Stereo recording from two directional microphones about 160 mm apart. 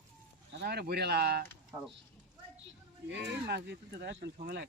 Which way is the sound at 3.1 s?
90° right.